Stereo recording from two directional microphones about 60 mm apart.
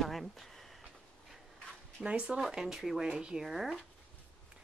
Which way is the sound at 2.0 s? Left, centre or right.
Right.